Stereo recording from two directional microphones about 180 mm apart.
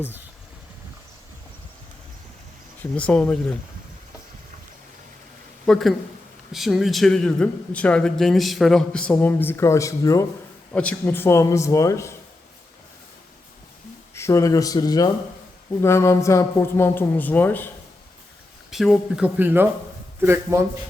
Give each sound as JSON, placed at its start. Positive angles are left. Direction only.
{"t": 2.9, "sound": "speech", "side_deg": 5}
{"t": 5.6, "sound": "a man's voice", "side_deg": 5}
{"t": 14.2, "sound": "speech", "side_deg": 15}
{"t": 18.7, "sound": "a man's voice", "side_deg": 0}